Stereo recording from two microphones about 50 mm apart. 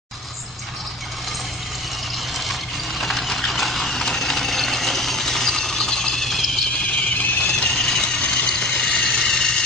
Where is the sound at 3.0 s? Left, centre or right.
Centre.